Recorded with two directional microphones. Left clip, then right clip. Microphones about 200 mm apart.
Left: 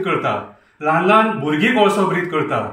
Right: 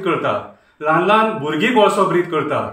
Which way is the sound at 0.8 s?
20° right (ahead or behind).